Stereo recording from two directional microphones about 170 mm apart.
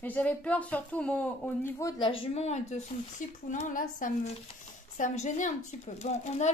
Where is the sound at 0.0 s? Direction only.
10° left (ahead or behind).